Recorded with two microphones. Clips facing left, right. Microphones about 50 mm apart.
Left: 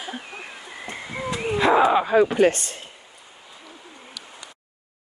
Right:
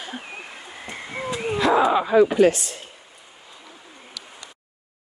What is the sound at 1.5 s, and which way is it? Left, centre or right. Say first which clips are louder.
Speech: left 1 dB; left.